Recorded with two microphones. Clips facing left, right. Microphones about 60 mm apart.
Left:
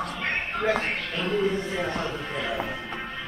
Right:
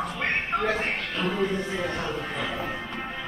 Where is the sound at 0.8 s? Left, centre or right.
Centre.